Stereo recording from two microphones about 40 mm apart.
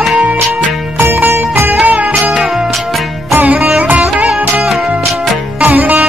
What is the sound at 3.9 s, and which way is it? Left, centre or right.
Music, right.